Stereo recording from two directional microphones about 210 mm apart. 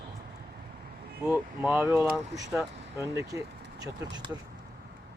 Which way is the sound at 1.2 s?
10° right (ahead or behind).